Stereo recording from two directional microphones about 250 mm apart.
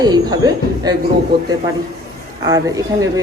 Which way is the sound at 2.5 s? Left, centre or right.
Centre.